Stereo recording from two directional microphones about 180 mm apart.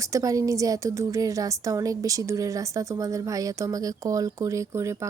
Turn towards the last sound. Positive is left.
turn(degrees=-15)  # may be behind; listen again after turning